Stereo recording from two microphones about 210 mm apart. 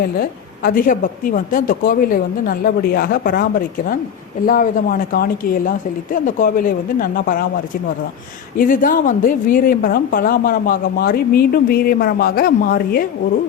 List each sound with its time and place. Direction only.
0.2 s a woman's voice: 45° left (ahead or behind)
4.4 s a woman's voice: 45° left (ahead or behind)
8.5 s a woman's voice: 40° left (ahead or behind)